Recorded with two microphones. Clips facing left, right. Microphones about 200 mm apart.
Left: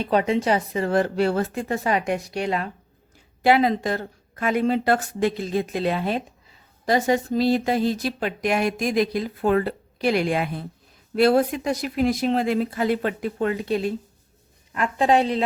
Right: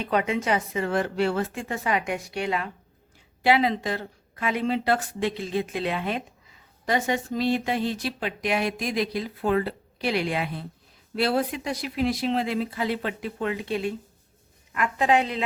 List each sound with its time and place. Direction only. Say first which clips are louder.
0.0 s speech: left 4 dB; 35° left (ahead or behind)